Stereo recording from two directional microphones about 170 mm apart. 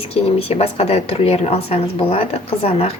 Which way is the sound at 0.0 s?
35° left (ahead or behind).